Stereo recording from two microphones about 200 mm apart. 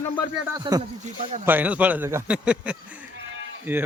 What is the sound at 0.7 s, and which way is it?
Speech, 25° right (ahead or behind).